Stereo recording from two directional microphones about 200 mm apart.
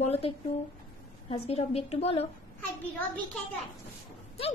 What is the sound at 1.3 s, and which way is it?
Speech, 30° left (ahead or behind).